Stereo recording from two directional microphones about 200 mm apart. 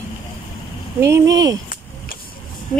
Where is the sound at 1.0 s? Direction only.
15° right (ahead or behind).